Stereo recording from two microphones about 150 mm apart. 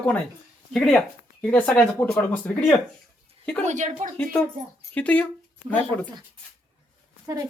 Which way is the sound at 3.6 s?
55° right (ahead or behind).